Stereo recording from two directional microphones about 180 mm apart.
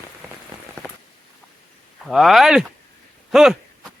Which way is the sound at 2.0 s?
Centre (ahead or behind).